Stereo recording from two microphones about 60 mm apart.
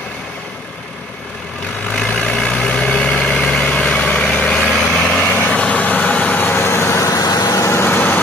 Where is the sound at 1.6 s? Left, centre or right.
Left.